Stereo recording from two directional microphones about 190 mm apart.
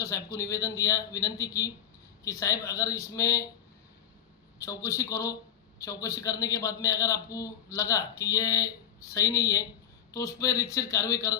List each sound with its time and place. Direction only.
0.0 s a man's voice: 15° left (ahead or behind)
4.6 s a man's voice: 15° left (ahead or behind)